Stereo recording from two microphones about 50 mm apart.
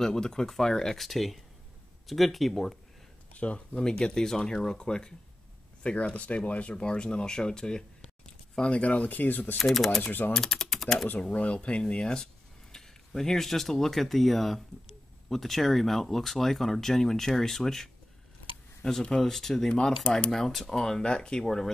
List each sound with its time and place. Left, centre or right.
0.0 s speech: centre
3.3 s speech: left
3.8 s speech: centre; by 9.6 s left
9.6 s speech: centre
10.0 s speech: left
10.3 s speech: centre
11.1 s speech: left; by 17.8 s centre
18.9 s speech: centre
20.3 s speech: centre